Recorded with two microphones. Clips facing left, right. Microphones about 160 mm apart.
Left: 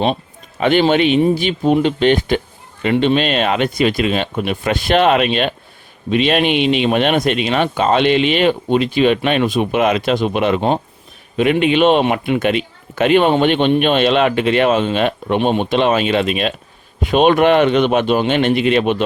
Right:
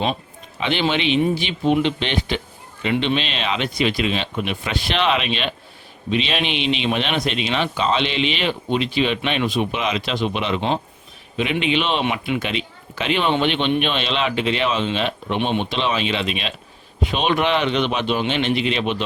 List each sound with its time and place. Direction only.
0.6 s speech: 50° left (ahead or behind)